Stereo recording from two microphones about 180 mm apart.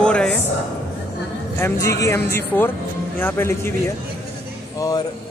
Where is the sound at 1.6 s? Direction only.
15° left (ahead or behind).